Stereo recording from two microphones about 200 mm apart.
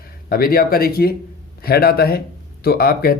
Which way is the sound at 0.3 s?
45° left (ahead or behind).